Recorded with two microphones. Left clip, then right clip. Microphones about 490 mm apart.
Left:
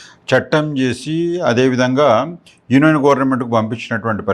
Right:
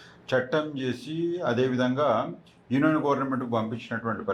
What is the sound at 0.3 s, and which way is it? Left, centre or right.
Speech, left.